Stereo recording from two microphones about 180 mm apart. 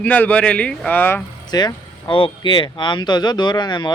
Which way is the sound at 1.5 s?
25° left (ahead or behind).